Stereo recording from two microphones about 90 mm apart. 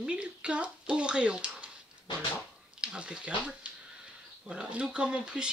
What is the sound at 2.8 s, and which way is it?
Speech, 10° right (ahead or behind).